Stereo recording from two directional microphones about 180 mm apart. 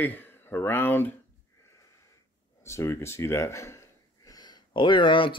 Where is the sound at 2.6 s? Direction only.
15° left (ahead or behind).